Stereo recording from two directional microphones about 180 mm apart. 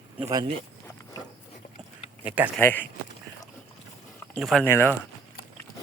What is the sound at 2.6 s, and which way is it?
Speech, 10° left (ahead or behind).